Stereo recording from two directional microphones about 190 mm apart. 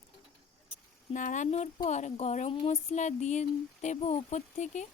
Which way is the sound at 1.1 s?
40° left (ahead or behind).